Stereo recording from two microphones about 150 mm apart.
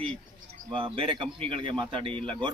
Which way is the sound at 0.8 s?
35° right (ahead or behind).